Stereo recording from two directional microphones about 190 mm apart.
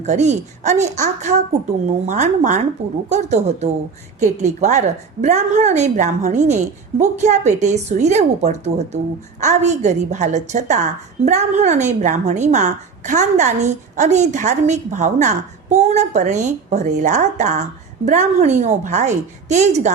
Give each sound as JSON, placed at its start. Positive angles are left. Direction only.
{"t": 0.0, "sound": "a woman's voice", "side_deg": -35}